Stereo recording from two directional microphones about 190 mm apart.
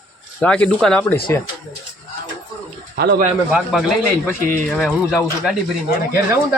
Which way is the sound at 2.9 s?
55° right (ahead or behind).